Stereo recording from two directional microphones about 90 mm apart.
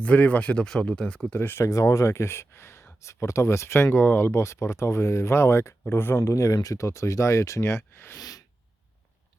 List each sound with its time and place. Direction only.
0.0 s speech: 15° left (ahead or behind)
8.2 s sneeze: 45° left (ahead or behind)